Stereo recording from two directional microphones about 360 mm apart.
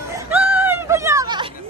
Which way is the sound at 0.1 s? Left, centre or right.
Centre.